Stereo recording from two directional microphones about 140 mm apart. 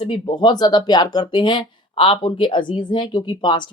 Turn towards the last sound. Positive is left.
turn(degrees=35)  # may be behind; listen again after turning